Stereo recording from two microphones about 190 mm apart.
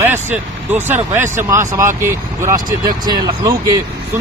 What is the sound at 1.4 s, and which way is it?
Speech, 15° right (ahead or behind).